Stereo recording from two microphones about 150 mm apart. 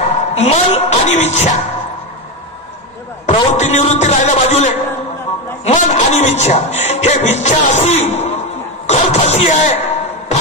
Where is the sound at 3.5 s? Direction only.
50° left (ahead or behind).